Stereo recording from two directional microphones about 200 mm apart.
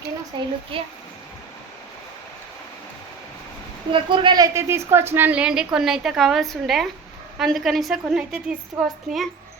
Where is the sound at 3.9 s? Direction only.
25° right (ahead or behind).